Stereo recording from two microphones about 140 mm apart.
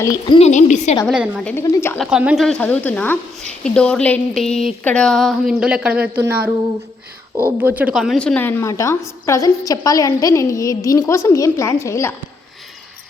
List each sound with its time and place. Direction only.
0.0 s a woman's voice: 25° left (ahead or behind)
0.3 s a woman's voice: 55° left (ahead or behind)
1.0 s speech: 10° right (ahead or behind)
1.6 s a woman's voice: 20° left (ahead or behind)
2.0 s a woman's voice: 5° right (ahead or behind)
7.9 s a woman's voice: centre (ahead or behind); by 12.1 s 20° left (ahead or behind)